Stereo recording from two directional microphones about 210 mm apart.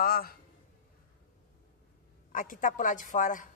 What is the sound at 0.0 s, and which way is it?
Speech, 45° left (ahead or behind).